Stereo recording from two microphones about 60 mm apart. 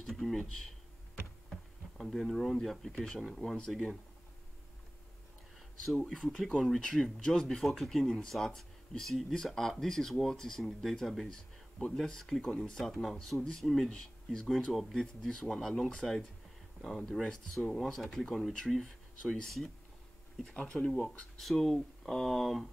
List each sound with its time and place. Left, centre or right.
0.0 s speech: centre
6.0 s speech: centre
14.7 s speech: centre
20.5 s speech: centre